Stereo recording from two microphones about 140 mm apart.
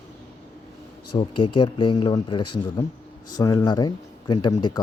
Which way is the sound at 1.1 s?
35° left (ahead or behind).